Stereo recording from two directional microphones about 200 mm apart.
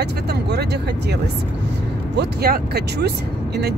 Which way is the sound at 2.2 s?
50° right (ahead or behind).